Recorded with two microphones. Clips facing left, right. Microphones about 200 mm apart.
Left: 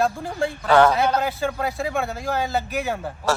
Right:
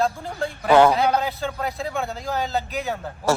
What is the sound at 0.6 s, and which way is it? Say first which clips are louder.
Speech: right 1 dB; 10° right (ahead or behind).